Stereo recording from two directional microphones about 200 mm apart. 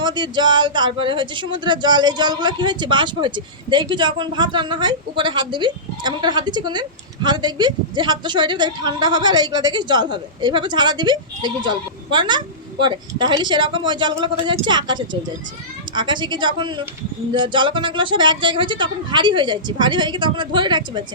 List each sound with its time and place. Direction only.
0.0 s a woman's voice: 20° right (ahead or behind)